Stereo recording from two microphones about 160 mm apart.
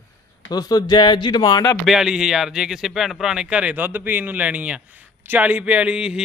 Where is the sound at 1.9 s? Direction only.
5° right (ahead or behind).